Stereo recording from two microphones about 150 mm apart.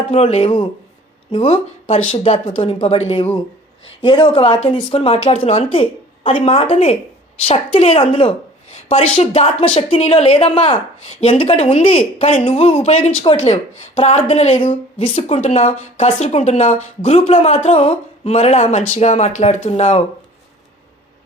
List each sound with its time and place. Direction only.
0.1 s a woman's voice: 45° left (ahead or behind)